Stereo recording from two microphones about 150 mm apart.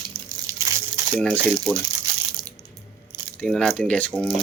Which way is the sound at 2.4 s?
25° right (ahead or behind).